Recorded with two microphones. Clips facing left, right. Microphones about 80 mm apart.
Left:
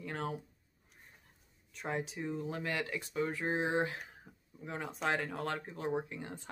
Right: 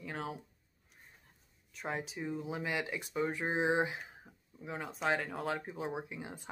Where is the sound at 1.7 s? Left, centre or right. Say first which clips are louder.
Left 1 dB; centre.